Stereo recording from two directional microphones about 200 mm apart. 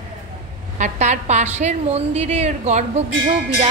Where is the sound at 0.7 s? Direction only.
35° right (ahead or behind).